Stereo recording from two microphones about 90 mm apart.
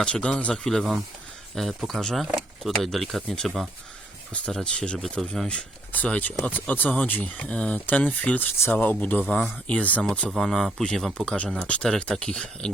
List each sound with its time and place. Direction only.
0.0 s speech: 10° left (ahead or behind)